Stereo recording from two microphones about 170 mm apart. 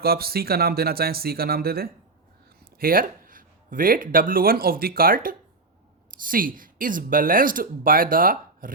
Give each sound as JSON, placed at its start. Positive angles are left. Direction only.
{"t": 0.0, "sound": "speech", "side_deg": -65}